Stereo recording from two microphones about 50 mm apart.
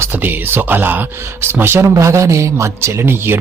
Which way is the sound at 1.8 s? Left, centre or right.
Right.